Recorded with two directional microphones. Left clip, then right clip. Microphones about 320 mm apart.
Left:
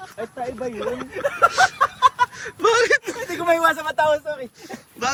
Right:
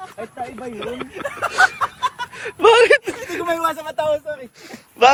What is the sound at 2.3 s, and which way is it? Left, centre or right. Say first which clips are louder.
Speech: right 6 dB; centre.